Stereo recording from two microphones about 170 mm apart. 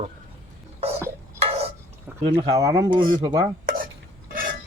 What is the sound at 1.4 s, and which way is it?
Tick-tock, 35° right (ahead or behind).